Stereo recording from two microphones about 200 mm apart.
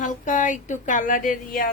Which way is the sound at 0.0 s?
40° left (ahead or behind).